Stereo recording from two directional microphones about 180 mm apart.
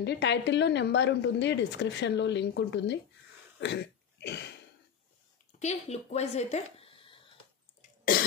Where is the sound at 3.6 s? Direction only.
70° left (ahead or behind).